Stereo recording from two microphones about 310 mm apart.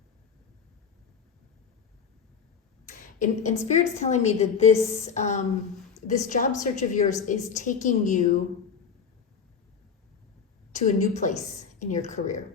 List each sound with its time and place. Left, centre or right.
2.9 s a sound: left
3.7 s a woman's voice: left
10.7 s a woman's voice: left